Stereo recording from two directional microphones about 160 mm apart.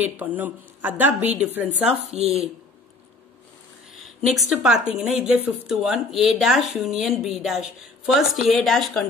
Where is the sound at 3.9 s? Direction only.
Centre (ahead or behind).